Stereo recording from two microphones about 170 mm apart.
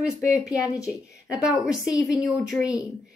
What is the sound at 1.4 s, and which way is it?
A woman's voice, 5° right (ahead or behind).